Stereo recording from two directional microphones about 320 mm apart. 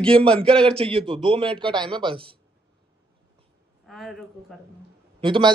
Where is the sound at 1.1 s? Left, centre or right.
Centre.